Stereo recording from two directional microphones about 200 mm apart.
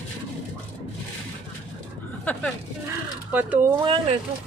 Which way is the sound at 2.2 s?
5° left (ahead or behind).